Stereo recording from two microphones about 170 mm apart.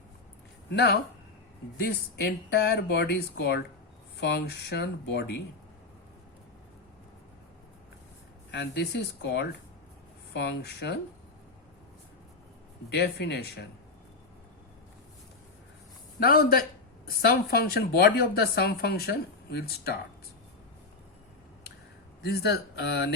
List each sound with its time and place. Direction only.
0.7 s a woman's voice: 80° left
8.4 s a woman's voice: 75° left (ahead or behind)
12.9 s a woman's voice: 75° left (ahead or behind)
16.2 s a woman's voice: 60° left (ahead or behind)
22.2 s a woman's voice: 85° left